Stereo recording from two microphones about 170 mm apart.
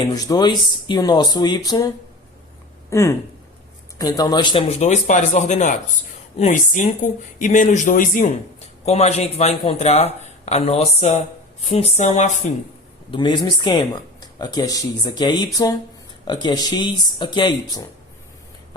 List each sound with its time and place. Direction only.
0.0 s speech: 20° left (ahead or behind)
2.9 s speech: 15° left (ahead or behind)
4.8 s speech: 45° left (ahead or behind)
13.1 s speech: 25° left (ahead or behind)